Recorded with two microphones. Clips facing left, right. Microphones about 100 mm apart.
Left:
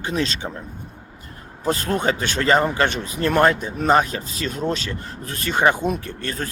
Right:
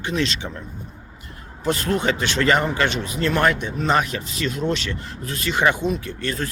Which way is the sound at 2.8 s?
45° left (ahead or behind).